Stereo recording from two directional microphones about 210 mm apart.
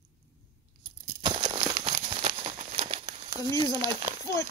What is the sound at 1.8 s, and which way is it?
Crumpling, 30° right (ahead or behind).